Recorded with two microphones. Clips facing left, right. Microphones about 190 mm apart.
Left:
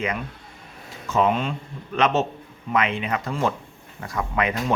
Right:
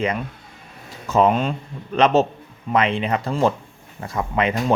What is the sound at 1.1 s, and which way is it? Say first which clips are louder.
Speech: right 4 dB; 40° right (ahead or behind).